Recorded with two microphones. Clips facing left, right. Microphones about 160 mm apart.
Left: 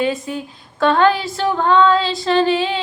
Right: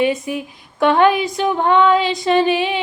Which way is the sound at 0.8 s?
20° right (ahead or behind).